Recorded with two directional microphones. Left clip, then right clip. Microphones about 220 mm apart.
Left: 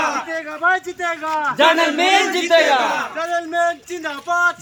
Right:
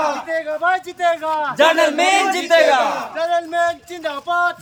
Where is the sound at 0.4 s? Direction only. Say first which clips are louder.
Left 1 dB; 15° right (ahead or behind).